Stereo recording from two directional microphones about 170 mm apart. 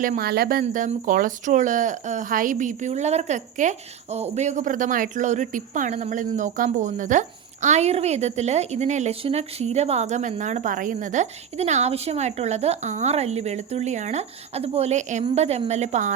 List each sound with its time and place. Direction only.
0.0 s speech: 55° right (ahead or behind)
0.6 s a woman's voice: 45° right (ahead or behind)